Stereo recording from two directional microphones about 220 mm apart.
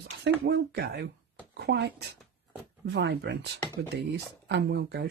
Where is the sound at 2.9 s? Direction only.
50° right (ahead or behind).